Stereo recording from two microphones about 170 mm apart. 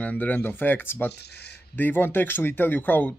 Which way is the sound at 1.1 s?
75° left (ahead or behind).